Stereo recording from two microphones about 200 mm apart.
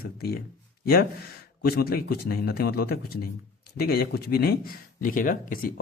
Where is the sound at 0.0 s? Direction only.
50° left (ahead or behind).